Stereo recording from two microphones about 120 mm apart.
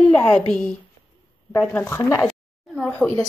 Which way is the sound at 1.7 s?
20° left (ahead or behind).